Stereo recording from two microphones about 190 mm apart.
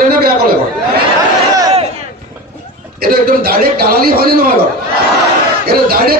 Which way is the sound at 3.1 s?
50° right (ahead or behind).